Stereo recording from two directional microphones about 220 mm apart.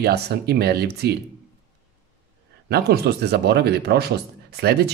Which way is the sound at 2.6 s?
45° right (ahead or behind).